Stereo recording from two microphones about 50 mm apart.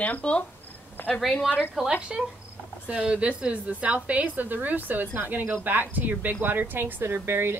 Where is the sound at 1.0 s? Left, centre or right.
Left.